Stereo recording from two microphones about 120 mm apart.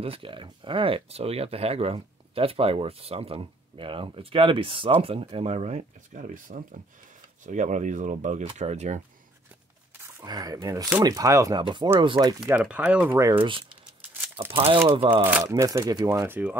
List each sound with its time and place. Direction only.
0.0 s speech: 50° right (ahead or behind); by 8.5 s 85° right
8.5 s speech: 70° right (ahead or behind)
10.2 s speech: 35° right (ahead or behind)
11.6 s speech: 40° right (ahead or behind)
12.4 s speech: 10° right (ahead or behind)
13.3 s speech: 45° right (ahead or behind)
15.4 s speech: 30° right (ahead or behind)
16.1 s speech: 20° right (ahead or behind)